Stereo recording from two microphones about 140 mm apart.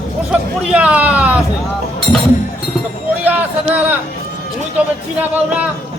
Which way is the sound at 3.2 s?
10° right (ahead or behind).